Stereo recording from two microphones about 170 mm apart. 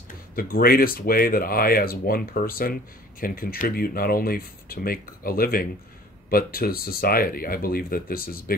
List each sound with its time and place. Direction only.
0.1 s speech: 60° left (ahead or behind)